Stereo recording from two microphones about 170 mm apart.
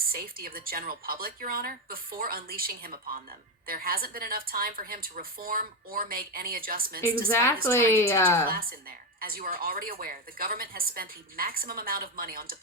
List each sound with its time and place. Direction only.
0.1 s a woman's voice: 60° right (ahead or behind)
7.3 s a woman's voice: 15° left (ahead or behind)
8.4 s a woman's voice: 60° right (ahead or behind)